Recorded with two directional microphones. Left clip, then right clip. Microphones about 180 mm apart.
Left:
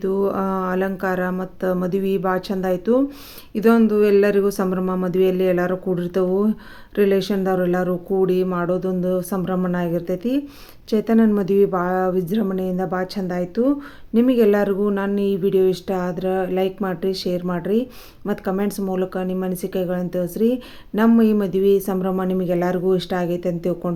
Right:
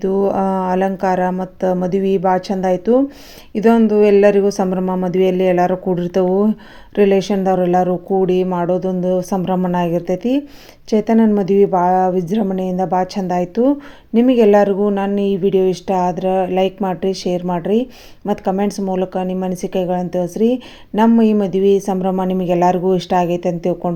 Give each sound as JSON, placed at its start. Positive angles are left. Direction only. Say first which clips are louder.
{"t": 0.2, "sound": "speech", "louder": "right 5 dB", "side_deg": -10}